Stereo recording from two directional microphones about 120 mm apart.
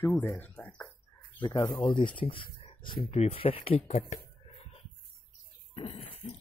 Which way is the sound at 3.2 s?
55° left (ahead or behind).